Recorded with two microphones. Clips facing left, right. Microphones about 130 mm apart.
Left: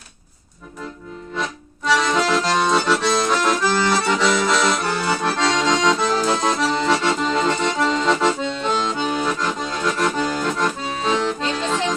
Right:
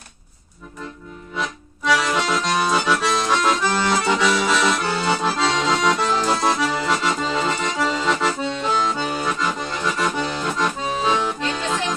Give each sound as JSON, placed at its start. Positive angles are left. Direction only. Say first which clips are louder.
{"t": 1.4, "sound": "accordion", "louder": "even", "side_deg": 0}
{"t": 4.2, "sound": "accordion", "louder": "left 1 dB", "side_deg": 0}
{"t": 4.9, "sound": "accordion", "louder": "even", "side_deg": -20}
{"t": 10.0, "sound": "accordion", "louder": "left 3 dB", "side_deg": -10}